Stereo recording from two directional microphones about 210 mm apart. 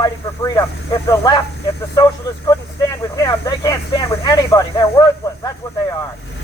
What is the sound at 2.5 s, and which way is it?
Speech, 15° left (ahead or behind).